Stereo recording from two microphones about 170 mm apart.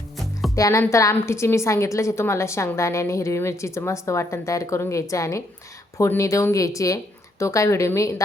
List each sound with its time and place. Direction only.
0.5 s a woman's voice: 15° left (ahead or behind)